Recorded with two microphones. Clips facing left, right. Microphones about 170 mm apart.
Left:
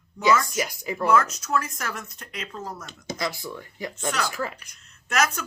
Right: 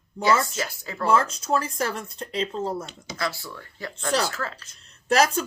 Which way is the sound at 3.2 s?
15° left (ahead or behind).